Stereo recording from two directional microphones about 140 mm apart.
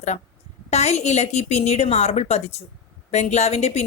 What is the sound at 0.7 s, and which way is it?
Speech, 50° left (ahead or behind).